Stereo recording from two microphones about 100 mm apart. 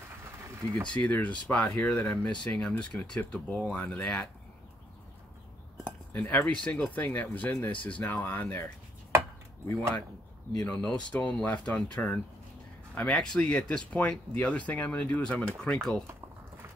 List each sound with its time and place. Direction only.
0.8 s speech: 15° left (ahead or behind)
6.1 s speech: 15° left (ahead or behind)
10.6 s speech: 10° left (ahead or behind)